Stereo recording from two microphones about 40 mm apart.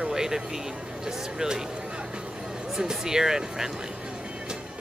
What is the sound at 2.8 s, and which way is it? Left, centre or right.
Speech, centre.